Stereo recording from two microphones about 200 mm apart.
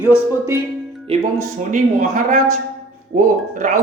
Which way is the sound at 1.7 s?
40° right (ahead or behind).